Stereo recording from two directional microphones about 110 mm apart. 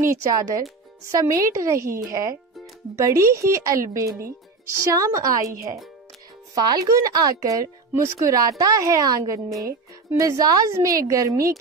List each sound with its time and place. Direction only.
0.0 s speech: 25° right (ahead or behind)
6.5 s a woman's voice: 35° right (ahead or behind)